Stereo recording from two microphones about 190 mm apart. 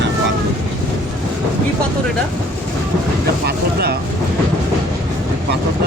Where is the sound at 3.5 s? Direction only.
55° right (ahead or behind).